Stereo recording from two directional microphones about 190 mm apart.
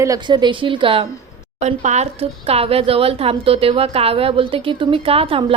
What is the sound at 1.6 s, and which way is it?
Speech, 35° right (ahead or behind).